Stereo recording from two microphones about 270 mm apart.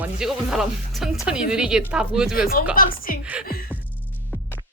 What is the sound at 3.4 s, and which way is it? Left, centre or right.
Music, left.